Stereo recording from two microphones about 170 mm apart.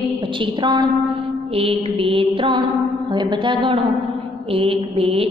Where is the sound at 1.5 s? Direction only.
35° right (ahead or behind).